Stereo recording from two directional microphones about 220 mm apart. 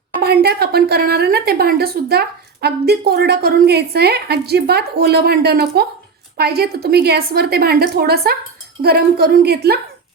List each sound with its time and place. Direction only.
0.2 s a woman's voice: 45° right (ahead or behind)